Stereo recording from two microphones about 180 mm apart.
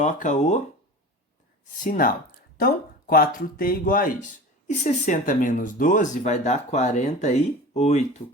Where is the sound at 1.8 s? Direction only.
50° left (ahead or behind).